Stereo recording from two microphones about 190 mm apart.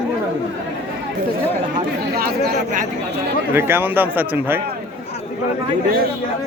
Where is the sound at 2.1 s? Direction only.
50° right (ahead or behind).